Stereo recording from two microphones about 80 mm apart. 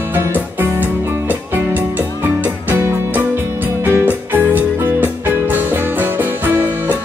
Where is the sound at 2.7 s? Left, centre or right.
Right.